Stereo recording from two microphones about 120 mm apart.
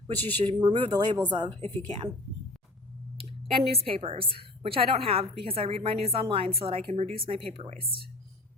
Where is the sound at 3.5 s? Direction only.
55° right (ahead or behind).